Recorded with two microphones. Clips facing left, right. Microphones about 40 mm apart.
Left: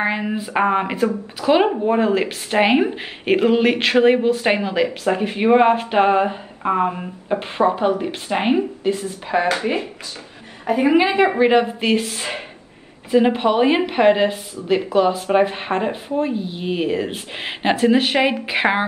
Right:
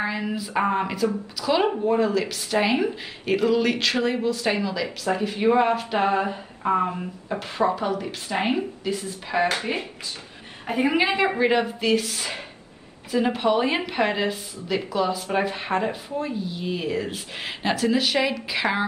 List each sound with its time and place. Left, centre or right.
0.0 s a woman's voice: left
6.6 s a woman's voice: left
10.9 s a woman's voice: left